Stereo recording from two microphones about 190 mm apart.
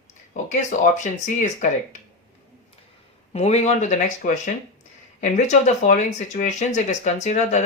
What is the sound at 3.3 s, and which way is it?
Speech, 35° left (ahead or behind).